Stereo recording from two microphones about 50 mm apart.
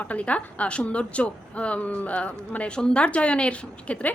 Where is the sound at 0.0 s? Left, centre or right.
Left.